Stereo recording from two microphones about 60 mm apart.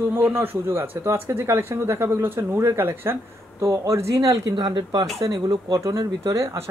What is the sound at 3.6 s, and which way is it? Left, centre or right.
Speech, right.